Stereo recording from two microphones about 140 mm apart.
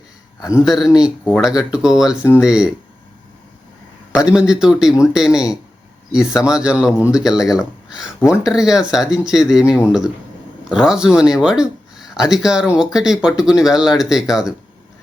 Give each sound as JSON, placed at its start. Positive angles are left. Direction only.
{"t": 0.3, "sound": "a man's voice", "side_deg": 25}
{"t": 0.6, "sound": "speech", "side_deg": 0}
{"t": 4.3, "sound": "speech", "side_deg": -5}